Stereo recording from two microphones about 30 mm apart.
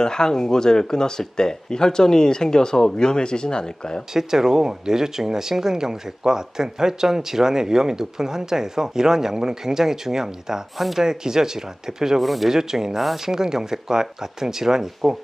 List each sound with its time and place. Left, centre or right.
0.0 s speech: left
4.1 s speech: centre
12.2 s speech: centre
12.5 s speech: centre